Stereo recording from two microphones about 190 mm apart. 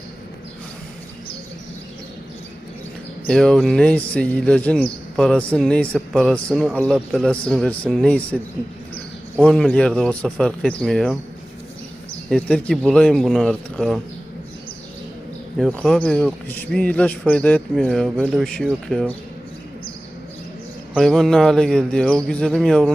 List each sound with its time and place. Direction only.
3.2 s a man's voice: 5° left (ahead or behind)
12.3 s a man's voice: 5° left (ahead or behind)
15.5 s a man's voice: centre (ahead or behind)
20.9 s a man's voice: centre (ahead or behind)